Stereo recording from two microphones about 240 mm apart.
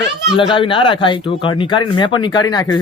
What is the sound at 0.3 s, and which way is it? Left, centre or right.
Speech, left.